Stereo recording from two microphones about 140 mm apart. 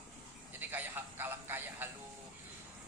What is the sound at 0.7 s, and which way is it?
Music, 15° right (ahead or behind).